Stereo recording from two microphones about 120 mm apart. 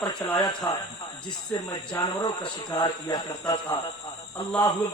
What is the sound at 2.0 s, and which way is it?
A man's voice, 40° left (ahead or behind).